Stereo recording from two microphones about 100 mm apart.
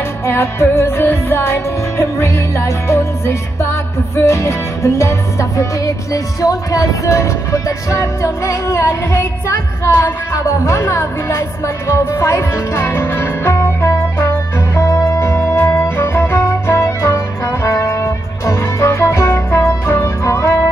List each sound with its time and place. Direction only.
0.3 s music: 25° left (ahead or behind)